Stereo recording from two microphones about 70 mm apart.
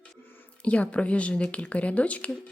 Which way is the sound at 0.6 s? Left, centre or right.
Left.